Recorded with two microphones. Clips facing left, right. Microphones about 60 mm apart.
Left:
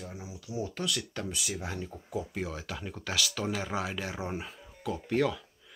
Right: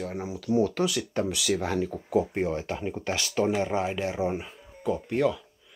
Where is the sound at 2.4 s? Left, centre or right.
Right; by 5.4 s centre.